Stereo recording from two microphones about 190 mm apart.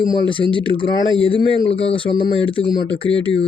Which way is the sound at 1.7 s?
30° left (ahead or behind).